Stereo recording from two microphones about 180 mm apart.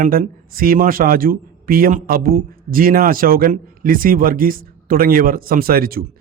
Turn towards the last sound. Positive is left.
turn(degrees=-55)  # may be behind; listen again after turning